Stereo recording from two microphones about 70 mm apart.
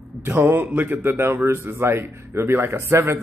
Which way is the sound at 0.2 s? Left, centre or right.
Right.